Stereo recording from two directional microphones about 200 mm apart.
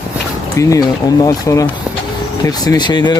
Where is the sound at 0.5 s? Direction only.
15° left (ahead or behind).